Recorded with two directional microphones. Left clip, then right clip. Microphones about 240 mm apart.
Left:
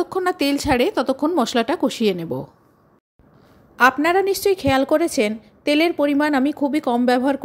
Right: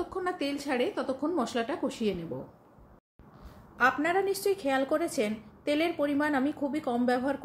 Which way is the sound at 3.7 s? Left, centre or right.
Left.